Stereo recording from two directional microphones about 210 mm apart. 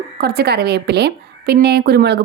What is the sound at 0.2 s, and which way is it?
A woman's voice, 50° right (ahead or behind).